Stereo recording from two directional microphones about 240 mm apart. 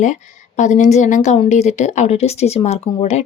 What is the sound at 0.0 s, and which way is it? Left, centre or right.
A woman's voice, left.